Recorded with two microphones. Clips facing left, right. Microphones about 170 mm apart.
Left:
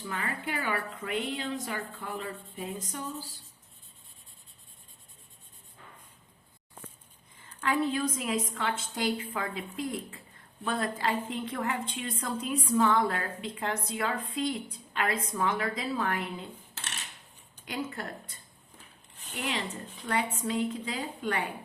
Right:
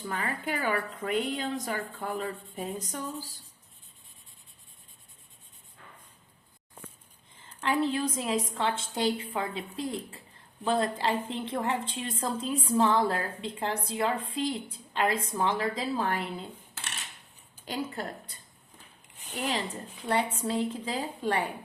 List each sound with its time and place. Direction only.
0.0 s a woman's voice: 45° right (ahead or behind)
7.6 s a woman's voice: 30° right (ahead or behind)
17.7 s a woman's voice: 30° right (ahead or behind)
20.1 s a woman's voice: 35° right (ahead or behind)